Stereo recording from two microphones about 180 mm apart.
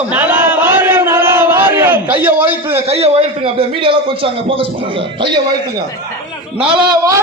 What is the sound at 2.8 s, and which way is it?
A man's voice, 35° right (ahead or behind).